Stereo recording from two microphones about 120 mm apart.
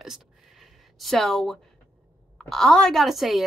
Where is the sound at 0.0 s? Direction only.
Centre (ahead or behind).